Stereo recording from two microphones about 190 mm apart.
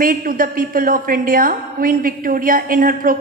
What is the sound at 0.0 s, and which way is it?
A woman's voice, 50° right (ahead or behind).